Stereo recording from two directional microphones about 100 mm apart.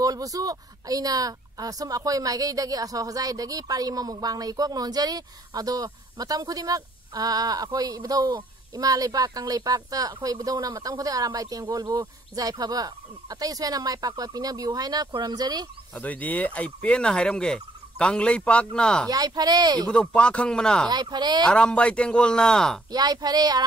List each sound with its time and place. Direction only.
0.0 s a woman's voice: 35° right (ahead or behind)
15.9 s speech: 15° left (ahead or behind)
19.0 s a woman's voice: 40° right (ahead or behind)
19.9 s speech: 10° left (ahead or behind)
20.9 s speech: 45° right (ahead or behind)
21.5 s speech: 10° left (ahead or behind)
22.8 s a woman's voice: 40° right (ahead or behind)